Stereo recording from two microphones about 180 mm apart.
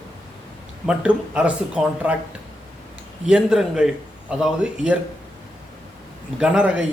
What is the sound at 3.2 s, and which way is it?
Speech, 5° right (ahead or behind).